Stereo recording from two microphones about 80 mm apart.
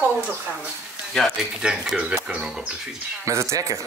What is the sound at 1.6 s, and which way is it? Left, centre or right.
Speech, centre.